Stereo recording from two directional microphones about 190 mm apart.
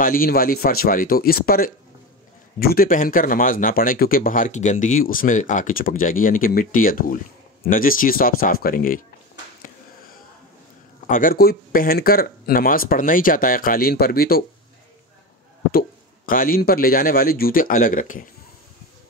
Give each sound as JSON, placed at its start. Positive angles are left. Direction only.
{"t": 0.0, "sound": "speech", "side_deg": 50}
{"t": 9.6, "sound": "a sound", "side_deg": 45}
{"t": 11.1, "sound": "speech", "side_deg": 45}
{"t": 16.3, "sound": "speech", "side_deg": 50}